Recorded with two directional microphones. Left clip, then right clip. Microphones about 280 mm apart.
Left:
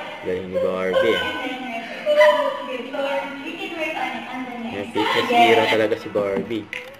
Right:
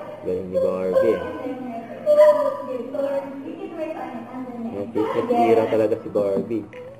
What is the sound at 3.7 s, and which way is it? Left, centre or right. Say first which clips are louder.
A woman's voice: left 5 dB; centre.